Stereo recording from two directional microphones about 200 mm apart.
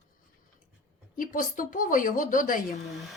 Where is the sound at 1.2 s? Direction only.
45° left (ahead or behind).